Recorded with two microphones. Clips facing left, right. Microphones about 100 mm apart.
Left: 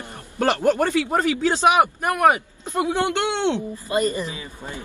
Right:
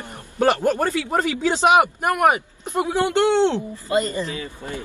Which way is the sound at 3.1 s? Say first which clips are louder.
Right 5 dB; 40° right (ahead or behind).